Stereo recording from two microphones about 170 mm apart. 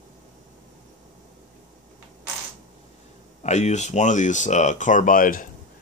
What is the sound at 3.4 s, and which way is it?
Speech, 40° left (ahead or behind).